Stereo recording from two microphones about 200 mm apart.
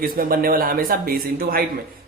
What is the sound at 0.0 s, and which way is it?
A man's voice, 45° right (ahead or behind).